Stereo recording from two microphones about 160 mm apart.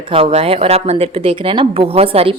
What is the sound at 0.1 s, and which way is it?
Speech, 35° right (ahead or behind).